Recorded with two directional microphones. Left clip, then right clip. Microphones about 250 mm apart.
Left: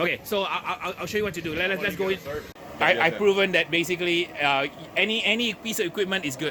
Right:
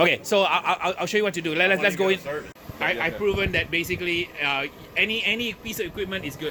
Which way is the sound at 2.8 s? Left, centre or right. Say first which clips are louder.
Left 4 dB; centre.